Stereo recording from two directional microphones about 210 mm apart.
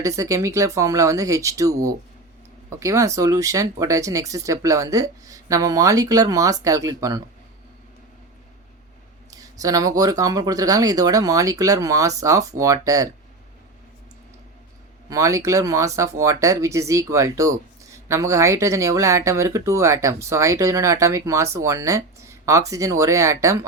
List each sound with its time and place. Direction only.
0.0 s speech: 15° right (ahead or behind)
9.3 s speech: 15° right (ahead or behind)
15.1 s speech: 15° right (ahead or behind)